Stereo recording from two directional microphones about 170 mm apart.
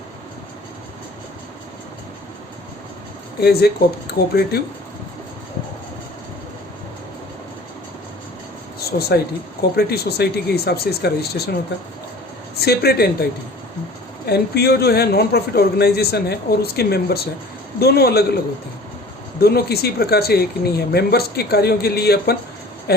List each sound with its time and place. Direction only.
3.4 s speech: 70° left (ahead or behind)
8.8 s speech: 65° left (ahead or behind)
12.5 s speech: 70° left (ahead or behind)
14.3 s speech: 70° left (ahead or behind)
19.4 s speech: 65° left (ahead or behind)